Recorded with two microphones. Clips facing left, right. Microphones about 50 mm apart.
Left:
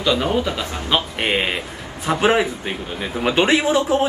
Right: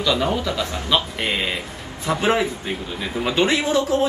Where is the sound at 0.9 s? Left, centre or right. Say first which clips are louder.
Left 2 dB; left.